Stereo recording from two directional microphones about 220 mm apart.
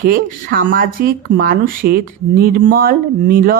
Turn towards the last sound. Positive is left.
turn(degrees=-40)  # may be behind; listen again after turning